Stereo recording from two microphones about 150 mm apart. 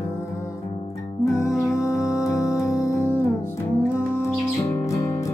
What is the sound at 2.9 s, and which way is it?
Music, 15° left (ahead or behind).